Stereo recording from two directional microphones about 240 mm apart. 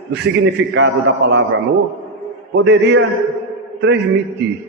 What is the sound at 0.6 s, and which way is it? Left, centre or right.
Speech, right.